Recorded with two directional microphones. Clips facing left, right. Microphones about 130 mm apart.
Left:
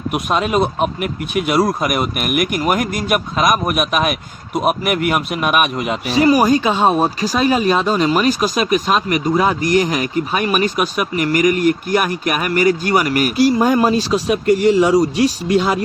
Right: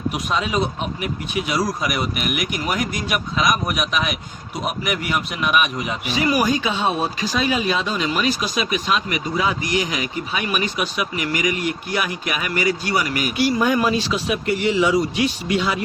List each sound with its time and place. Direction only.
0.1 s speech: 55° left (ahead or behind)
6.1 s speech: 40° left (ahead or behind)
13.3 s speech: 40° left (ahead or behind)